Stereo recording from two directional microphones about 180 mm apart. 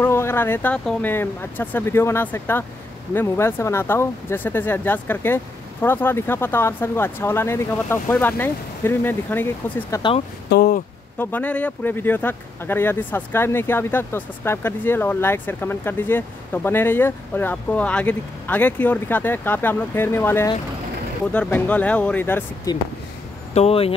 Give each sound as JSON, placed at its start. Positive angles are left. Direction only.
{"t": 0.0, "sound": "speech", "side_deg": 15}
{"t": 10.5, "sound": "a sound", "side_deg": 55}
{"t": 11.1, "sound": "speech", "side_deg": 10}
{"t": 22.7, "sound": "speech", "side_deg": 20}
{"t": 23.5, "sound": "speech", "side_deg": 35}